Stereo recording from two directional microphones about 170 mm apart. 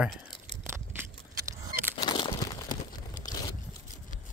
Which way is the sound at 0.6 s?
15° right (ahead or behind).